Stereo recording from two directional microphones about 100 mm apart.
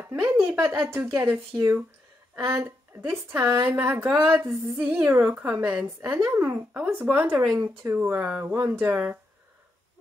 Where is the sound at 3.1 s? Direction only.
25° right (ahead or behind).